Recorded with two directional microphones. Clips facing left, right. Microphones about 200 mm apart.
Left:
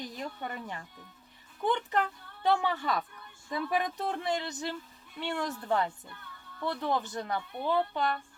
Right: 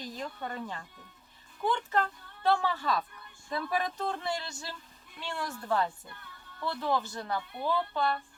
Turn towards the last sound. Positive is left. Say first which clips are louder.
# left 2 dB
turn(degrees=20)  # may be behind; listen again after turning